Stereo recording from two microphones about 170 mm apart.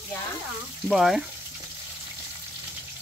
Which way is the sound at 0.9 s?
Centre (ahead or behind).